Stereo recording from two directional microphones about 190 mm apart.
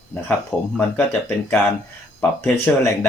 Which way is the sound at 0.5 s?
5° left (ahead or behind).